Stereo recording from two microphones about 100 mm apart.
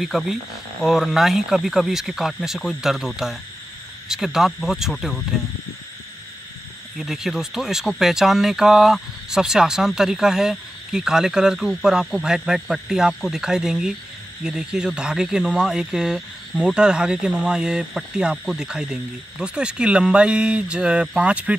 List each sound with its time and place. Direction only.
0.0 s speech: 5° right (ahead or behind)
7.0 s speech: 5° right (ahead or behind)